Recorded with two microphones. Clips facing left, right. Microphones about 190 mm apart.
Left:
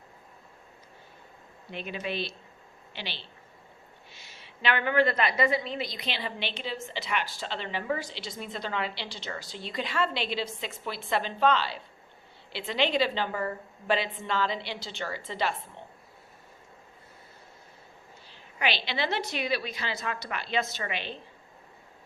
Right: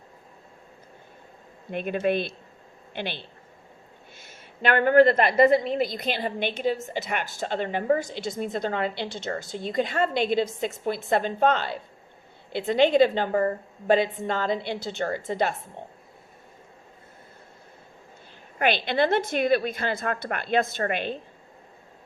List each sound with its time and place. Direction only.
1.7 s a woman's voice: 50° right (ahead or behind)
18.6 s a woman's voice: 50° right (ahead or behind)